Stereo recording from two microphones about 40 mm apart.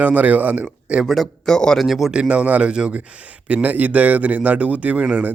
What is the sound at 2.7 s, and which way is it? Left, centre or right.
Speech, right.